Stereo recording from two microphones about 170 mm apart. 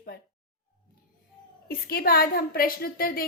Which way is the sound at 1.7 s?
65° left (ahead or behind).